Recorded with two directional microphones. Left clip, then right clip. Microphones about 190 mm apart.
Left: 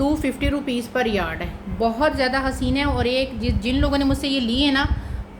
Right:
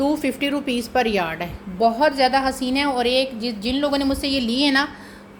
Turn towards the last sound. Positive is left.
turn(degrees=-20)  # may be behind; listen again after turning